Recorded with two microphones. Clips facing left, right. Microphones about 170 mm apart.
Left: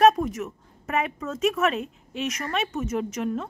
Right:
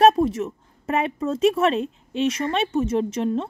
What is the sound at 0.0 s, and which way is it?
Speech, 30° right (ahead or behind).